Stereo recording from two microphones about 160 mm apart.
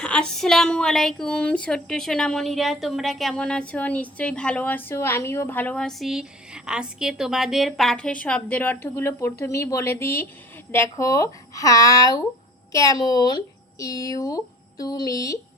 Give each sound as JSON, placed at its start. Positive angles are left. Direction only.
{"t": 0.0, "sound": "speech", "side_deg": 5}